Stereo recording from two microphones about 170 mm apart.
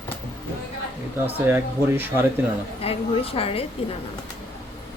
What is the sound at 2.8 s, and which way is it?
Speech, 35° left (ahead or behind).